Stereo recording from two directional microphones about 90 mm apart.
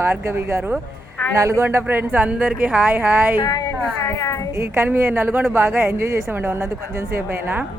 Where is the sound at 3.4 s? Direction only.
40° left (ahead or behind).